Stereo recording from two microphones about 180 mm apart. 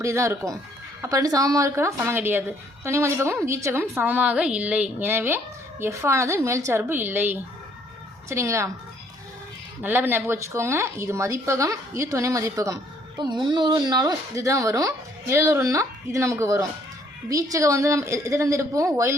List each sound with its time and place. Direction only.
0.0 s speech: 15° right (ahead or behind)
9.8 s speech: 10° right (ahead or behind)